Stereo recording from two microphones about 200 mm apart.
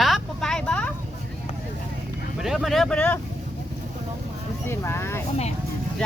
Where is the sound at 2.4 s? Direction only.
Centre (ahead or behind).